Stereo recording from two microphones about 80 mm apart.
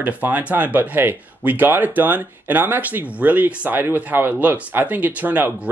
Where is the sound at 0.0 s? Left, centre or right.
Centre.